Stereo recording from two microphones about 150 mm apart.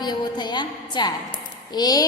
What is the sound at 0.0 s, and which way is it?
A woman's voice, 30° left (ahead or behind).